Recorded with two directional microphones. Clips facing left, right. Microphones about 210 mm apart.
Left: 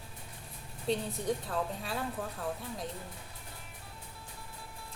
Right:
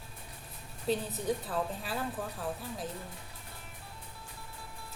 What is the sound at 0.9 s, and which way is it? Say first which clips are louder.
A woman's voice: right 1 dB; centre (ahead or behind).